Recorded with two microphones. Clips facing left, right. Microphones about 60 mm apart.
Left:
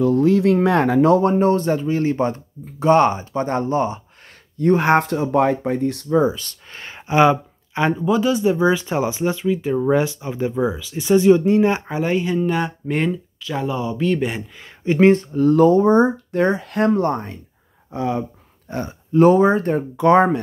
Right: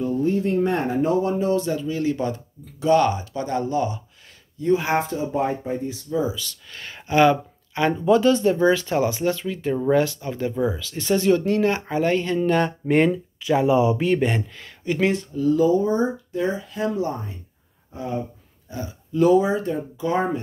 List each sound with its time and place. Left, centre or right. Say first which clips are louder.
0.0 s a sound: left 7 dB; left
1.2 s speech: left 5 dB; left
4.6 s speech: left 5 dB; left
6.8 s a sound: left 2 dB; left
8.0 s speech: right 4 dB; centre
13.1 s speech: right 4 dB; centre
14.6 s speech: left 10 dB; left
17.9 s speech: left 6 dB; left
18.7 s speech: left 6 dB; left